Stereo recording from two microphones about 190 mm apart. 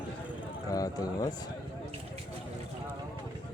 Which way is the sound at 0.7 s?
20° left (ahead or behind).